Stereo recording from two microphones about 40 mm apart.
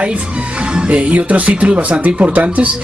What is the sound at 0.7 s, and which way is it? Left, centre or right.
Speech, right.